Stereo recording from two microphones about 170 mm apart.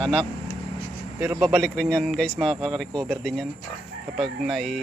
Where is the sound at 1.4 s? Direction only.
Centre (ahead or behind).